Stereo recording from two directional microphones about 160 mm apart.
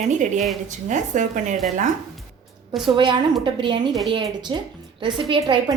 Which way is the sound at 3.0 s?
30° right (ahead or behind).